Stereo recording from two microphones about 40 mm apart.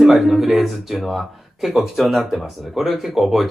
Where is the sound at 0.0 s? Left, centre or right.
Centre.